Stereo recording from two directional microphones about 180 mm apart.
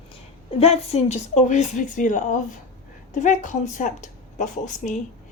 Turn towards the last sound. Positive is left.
turn(degrees=45)  # may be behind; listen again after turning